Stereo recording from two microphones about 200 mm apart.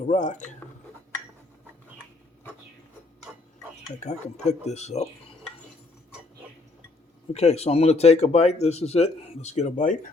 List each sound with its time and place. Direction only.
0.0 s speech: 35° left (ahead or behind)
4.0 s speech: 35° left (ahead or behind)
7.3 s speech: 30° left (ahead or behind)